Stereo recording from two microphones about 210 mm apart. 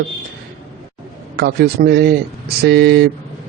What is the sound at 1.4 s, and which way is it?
A man's voice, 50° right (ahead or behind).